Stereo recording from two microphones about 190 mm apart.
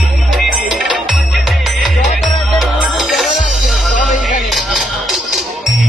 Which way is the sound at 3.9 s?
40° left (ahead or behind).